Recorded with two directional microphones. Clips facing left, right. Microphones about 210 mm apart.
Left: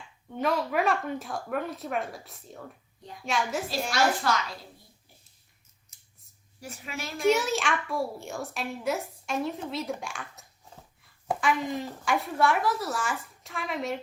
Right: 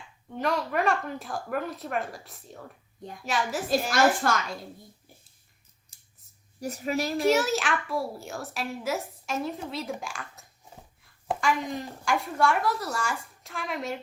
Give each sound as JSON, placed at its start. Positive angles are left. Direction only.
{"t": 0.3, "sound": "a child's voice", "side_deg": 0}
{"t": 3.9, "sound": "a woman's voice", "side_deg": -50}
{"t": 5.9, "sound": "scissors", "side_deg": -30}
{"t": 6.6, "sound": "a woman's voice", "side_deg": -40}
{"t": 7.2, "sound": "a child's voice", "side_deg": 0}